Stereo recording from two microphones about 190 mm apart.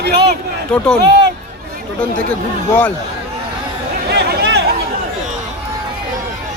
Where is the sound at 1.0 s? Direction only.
60° right (ahead or behind).